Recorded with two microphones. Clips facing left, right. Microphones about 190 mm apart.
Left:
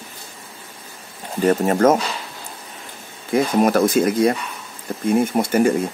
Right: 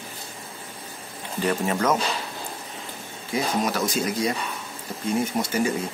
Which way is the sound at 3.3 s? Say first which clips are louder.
Left 9 dB; 55° left (ahead or behind).